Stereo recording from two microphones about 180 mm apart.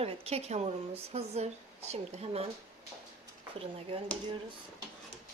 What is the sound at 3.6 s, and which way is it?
Speech, 30° right (ahead or behind).